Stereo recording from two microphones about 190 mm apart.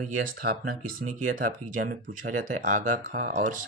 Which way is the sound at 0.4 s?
50° right (ahead or behind).